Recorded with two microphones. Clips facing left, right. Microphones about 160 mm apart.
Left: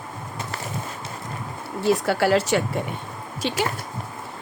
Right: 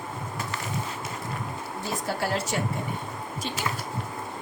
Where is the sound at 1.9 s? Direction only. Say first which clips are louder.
Left 10 dB; 80° left.